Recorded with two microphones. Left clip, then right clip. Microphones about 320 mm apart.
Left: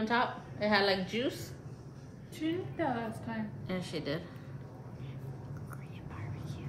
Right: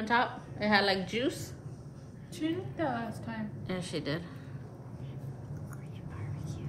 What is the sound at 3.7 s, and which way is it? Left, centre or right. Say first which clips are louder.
Speech: right 2 dB; right.